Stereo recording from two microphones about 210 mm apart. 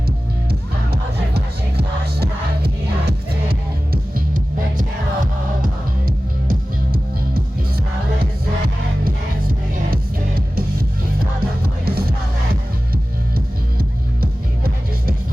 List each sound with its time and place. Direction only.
0.9 s music: 50° right (ahead or behind)
10.5 s music: 45° right (ahead or behind)
13.3 s music: 45° right (ahead or behind)